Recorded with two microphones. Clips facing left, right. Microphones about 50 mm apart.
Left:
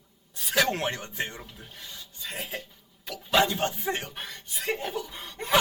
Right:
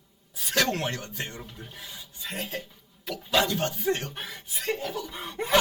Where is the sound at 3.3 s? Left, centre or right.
Left.